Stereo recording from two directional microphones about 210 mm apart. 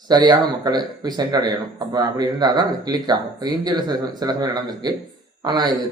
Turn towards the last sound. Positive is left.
turn(degrees=-20)  # may be behind; listen again after turning